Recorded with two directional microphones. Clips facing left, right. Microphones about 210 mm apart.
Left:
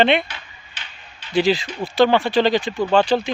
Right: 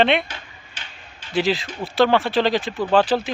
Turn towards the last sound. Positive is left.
turn(degrees=-5)  # may be behind; listen again after turning